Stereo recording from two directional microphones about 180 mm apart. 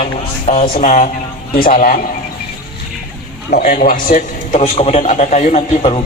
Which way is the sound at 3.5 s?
55° left (ahead or behind).